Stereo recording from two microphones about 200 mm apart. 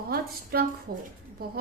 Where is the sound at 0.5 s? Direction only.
50° right (ahead or behind).